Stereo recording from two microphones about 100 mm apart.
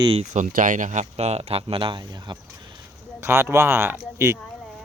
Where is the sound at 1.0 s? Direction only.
90° right; by 2.4 s 45° right (ahead or behind).